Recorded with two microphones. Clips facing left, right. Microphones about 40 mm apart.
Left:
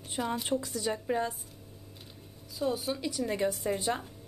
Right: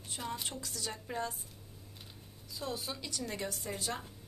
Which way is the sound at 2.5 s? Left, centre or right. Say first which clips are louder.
Left 8 dB; centre.